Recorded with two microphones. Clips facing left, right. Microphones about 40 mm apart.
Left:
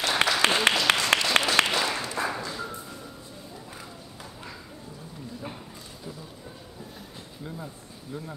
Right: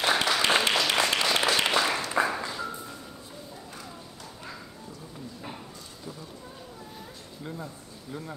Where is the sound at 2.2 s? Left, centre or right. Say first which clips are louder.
Right 1 dB; centre.